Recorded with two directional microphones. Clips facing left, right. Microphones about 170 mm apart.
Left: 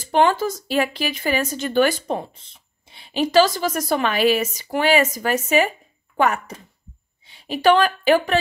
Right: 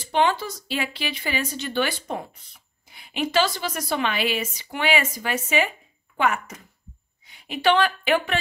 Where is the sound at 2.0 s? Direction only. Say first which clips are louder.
Left 5 dB; 25° left (ahead or behind).